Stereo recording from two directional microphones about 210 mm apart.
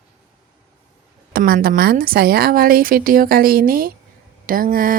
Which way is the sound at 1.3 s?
45° right (ahead or behind).